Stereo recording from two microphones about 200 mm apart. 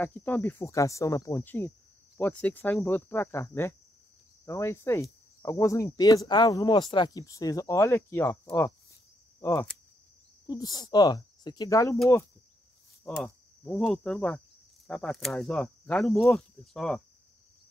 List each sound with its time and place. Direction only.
0.0 s speech: 10° left (ahead or behind)
13.0 s cricket: 5° left (ahead or behind)
14.9 s speech: 5° left (ahead or behind)